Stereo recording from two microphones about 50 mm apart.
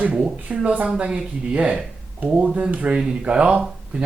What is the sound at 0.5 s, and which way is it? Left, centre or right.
A man's voice, right.